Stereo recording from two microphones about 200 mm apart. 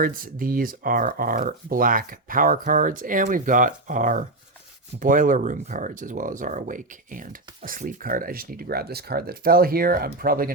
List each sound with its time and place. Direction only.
0.0 s speech: 45° right (ahead or behind)